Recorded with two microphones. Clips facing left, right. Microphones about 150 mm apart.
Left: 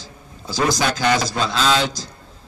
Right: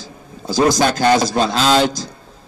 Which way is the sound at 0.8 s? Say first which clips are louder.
Right 5 dB; 50° right (ahead or behind).